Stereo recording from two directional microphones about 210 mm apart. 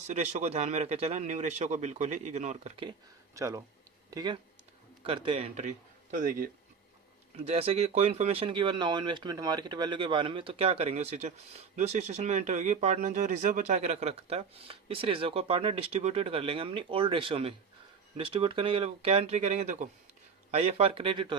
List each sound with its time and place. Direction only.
0.1 s a man's voice: 35° right (ahead or behind)
3.3 s a man's voice: 15° right (ahead or behind); by 6.5 s 40° right (ahead or behind)
7.3 s speech: 30° right (ahead or behind)